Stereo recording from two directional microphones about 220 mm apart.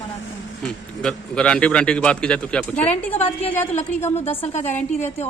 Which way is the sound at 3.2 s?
25° left (ahead or behind).